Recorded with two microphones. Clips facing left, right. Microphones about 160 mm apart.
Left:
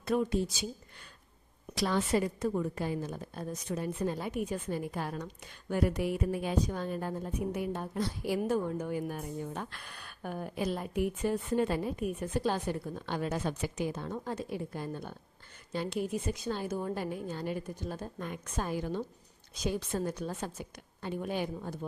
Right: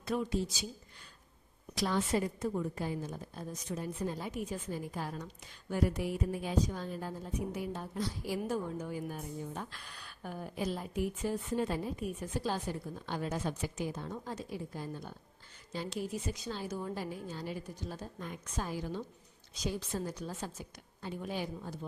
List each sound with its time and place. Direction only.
0.0 s a woman's voice: 55° left (ahead or behind)
1.7 s a woman's voice: 70° left (ahead or behind); by 21.8 s 55° left (ahead or behind)